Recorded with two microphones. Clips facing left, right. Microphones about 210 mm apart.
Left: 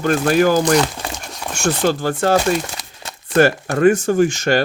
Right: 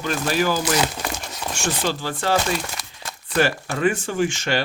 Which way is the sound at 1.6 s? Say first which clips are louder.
Left 8 dB; 50° left (ahead or behind).